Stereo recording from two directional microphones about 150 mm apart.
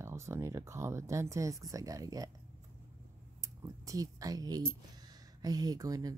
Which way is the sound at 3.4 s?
20° right (ahead or behind).